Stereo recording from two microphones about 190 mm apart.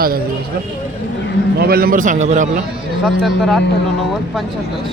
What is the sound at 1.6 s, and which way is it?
A man's voice, 55° right (ahead or behind).